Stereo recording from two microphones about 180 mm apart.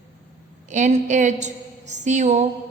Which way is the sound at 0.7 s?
40° right (ahead or behind).